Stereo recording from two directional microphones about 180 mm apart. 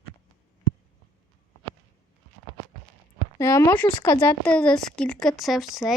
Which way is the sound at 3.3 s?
20° left (ahead or behind).